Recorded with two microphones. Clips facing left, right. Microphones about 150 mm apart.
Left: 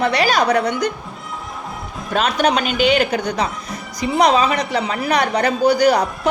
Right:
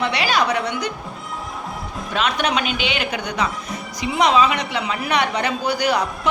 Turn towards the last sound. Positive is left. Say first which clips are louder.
# left 6 dB
turn(degrees=40)  # may be behind; listen again after turning